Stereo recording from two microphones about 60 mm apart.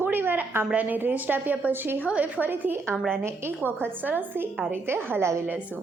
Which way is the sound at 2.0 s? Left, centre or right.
Right.